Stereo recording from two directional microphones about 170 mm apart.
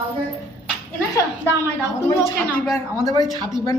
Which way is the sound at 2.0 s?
15° left (ahead or behind).